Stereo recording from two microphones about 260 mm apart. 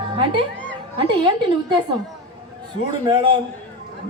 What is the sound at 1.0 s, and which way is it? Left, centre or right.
Speech, centre.